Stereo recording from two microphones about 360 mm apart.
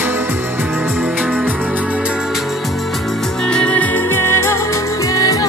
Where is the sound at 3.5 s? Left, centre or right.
Centre.